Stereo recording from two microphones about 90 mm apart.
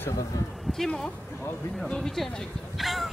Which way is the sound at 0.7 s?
5° left (ahead or behind).